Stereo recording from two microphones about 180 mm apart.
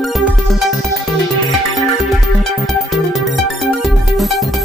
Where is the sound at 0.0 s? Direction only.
Centre (ahead or behind).